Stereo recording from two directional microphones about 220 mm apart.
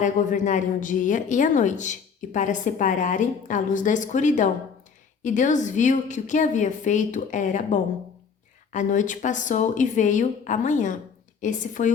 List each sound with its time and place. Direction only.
0.0 s a woman's voice: 35° left (ahead or behind)